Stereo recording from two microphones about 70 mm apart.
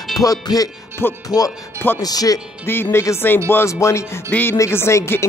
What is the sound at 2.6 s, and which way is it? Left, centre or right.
Speech, left.